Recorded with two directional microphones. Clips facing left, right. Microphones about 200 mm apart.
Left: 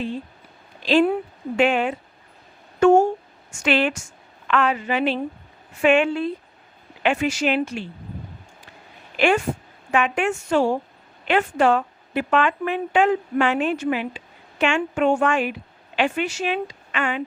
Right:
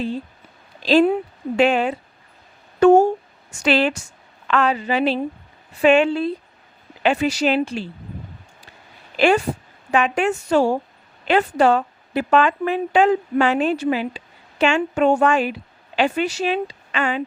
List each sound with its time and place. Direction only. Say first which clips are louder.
0.8 s a woman's voice: right 3 dB; 35° right (ahead or behind)
9.1 s speech: right 3 dB; 35° right (ahead or behind)